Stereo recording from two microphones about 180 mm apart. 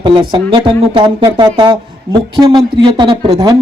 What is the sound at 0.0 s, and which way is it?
Speech, 30° right (ahead or behind).